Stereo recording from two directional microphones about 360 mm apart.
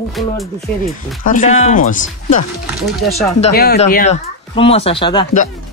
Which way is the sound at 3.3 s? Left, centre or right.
Left.